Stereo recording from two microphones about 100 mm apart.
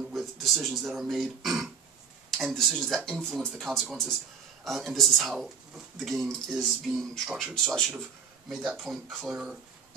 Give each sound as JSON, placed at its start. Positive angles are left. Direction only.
{"t": 0.1, "sound": "speech", "side_deg": 0}